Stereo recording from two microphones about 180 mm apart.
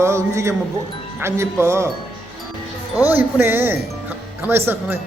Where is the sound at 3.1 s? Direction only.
10° right (ahead or behind).